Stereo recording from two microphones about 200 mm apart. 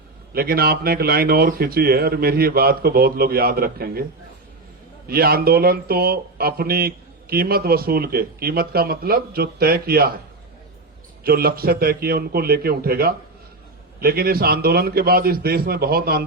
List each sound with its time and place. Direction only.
0.3 s speech: 50° right (ahead or behind)
5.0 s speech: 50° right (ahead or behind)
11.2 s speech: 50° right (ahead or behind)